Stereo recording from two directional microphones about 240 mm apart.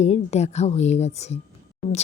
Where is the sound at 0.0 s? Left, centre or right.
Left.